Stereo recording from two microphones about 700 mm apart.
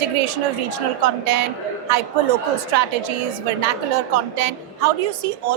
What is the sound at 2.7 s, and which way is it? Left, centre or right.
A woman's voice, right.